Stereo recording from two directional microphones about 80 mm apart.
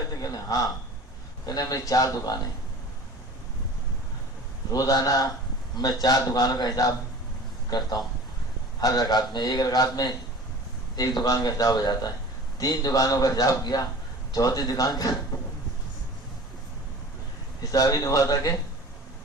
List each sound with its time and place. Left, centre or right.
0.2 s a man's voice: left
4.7 s a man's voice: left
17.6 s a man's voice: left